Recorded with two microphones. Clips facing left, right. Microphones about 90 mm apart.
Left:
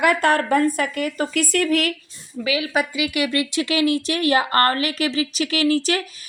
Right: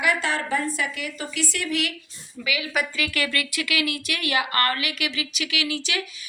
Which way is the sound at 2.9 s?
15° left (ahead or behind).